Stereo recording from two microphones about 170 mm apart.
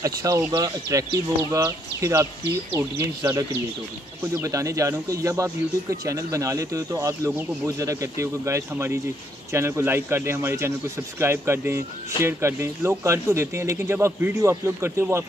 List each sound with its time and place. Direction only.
0.0 s speech: 20° right (ahead or behind)